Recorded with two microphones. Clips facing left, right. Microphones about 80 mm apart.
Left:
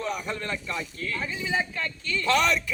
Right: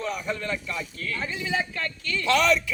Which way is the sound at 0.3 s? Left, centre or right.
Left.